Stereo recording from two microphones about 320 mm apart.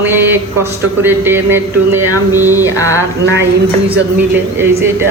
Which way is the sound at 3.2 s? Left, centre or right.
Right.